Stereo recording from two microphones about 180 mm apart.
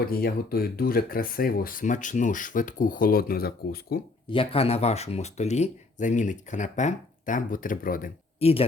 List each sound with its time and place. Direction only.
0.1 s speech: 55° left (ahead or behind)
4.3 s speech: 30° left (ahead or behind); by 8.1 s 50° left (ahead or behind)
8.4 s speech: 35° left (ahead or behind)